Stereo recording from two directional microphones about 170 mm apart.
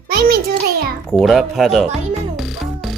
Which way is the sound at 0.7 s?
65° right (ahead or behind).